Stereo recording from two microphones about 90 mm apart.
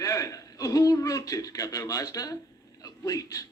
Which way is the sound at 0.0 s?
40° left (ahead or behind).